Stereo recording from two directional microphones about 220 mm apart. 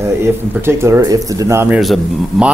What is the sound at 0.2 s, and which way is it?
Speech, 10° right (ahead or behind).